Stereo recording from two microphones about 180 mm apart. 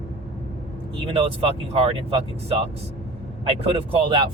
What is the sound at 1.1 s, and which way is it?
Speech, 30° right (ahead or behind).